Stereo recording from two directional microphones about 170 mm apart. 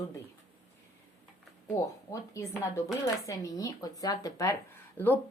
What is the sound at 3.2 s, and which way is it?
Speech, 20° left (ahead or behind).